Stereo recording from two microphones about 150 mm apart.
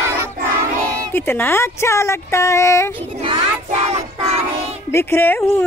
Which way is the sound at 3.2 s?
40° right (ahead or behind).